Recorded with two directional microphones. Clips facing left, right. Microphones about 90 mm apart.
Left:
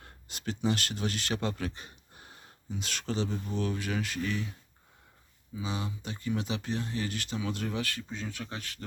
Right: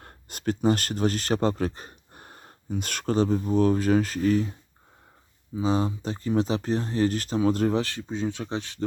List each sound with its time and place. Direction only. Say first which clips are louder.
0.0 s speech: right 9 dB; 50° right (ahead or behind)
5.5 s speech: right 11 dB; 35° right (ahead or behind)